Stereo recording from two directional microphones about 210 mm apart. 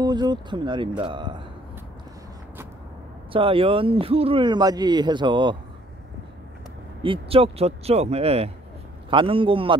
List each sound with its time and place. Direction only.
0.0 s speech: 20° right (ahead or behind)
3.3 s speech: 25° right (ahead or behind)
7.0 s speech: 25° right (ahead or behind)